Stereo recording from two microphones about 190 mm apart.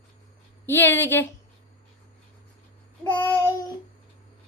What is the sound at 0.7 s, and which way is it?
Speech, 10° left (ahead or behind).